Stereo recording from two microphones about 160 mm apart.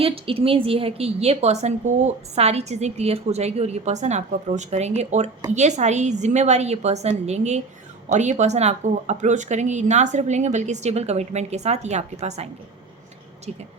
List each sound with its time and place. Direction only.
0.0 s a woman's voice: 35° right (ahead or behind)